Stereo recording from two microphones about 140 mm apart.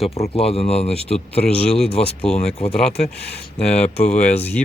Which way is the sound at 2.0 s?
5° left (ahead or behind).